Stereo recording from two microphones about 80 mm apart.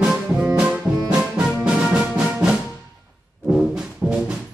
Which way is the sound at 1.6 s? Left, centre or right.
Centre.